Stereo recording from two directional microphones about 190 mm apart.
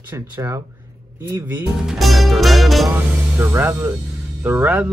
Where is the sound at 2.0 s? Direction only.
Centre (ahead or behind).